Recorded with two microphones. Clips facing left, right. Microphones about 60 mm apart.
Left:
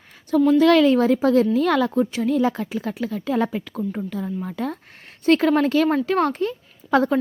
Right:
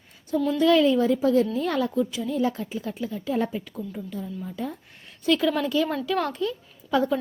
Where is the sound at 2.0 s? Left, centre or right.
Left.